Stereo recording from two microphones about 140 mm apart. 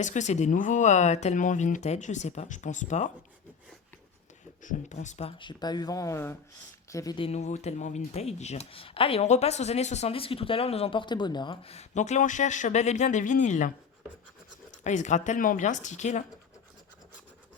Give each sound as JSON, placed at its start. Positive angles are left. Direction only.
{"t": 0.0, "sound": "speech", "side_deg": 60}
{"t": 4.6, "sound": "speech", "side_deg": 60}
{"t": 5.4, "sound": "speech", "side_deg": 30}
{"t": 7.2, "sound": "speech", "side_deg": 50}
{"t": 14.8, "sound": "speech", "side_deg": 60}